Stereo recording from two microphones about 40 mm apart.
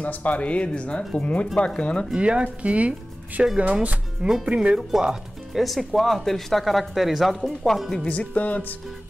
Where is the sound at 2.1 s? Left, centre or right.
Right.